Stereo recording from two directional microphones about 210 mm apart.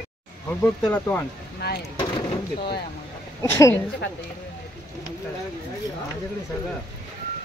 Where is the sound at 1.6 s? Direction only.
50° left (ahead or behind).